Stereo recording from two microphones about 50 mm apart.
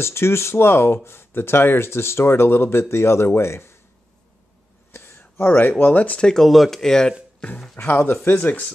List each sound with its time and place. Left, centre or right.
0.0 s speech: left
4.9 s a sound: left
5.6 s speech: left
6.2 s speech: centre
7.7 s speech: left